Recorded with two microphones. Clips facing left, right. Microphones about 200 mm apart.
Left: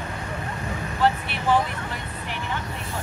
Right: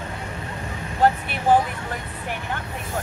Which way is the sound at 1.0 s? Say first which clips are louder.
Right 3 dB; 45° right (ahead or behind).